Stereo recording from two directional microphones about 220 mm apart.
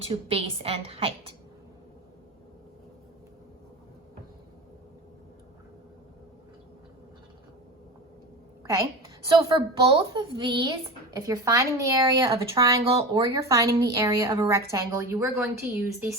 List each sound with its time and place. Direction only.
0.0 s a woman's voice: 25° right (ahead or behind)
9.2 s a woman's voice: 20° right (ahead or behind)